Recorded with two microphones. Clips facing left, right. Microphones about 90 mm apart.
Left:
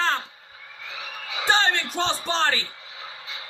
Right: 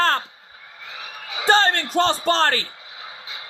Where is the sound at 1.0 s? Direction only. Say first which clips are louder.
Right 1 dB; 5° right (ahead or behind).